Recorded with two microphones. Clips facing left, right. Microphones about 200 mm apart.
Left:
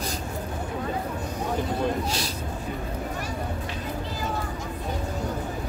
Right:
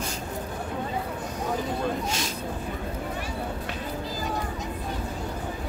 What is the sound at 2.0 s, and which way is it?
Speech, 35° left (ahead or behind).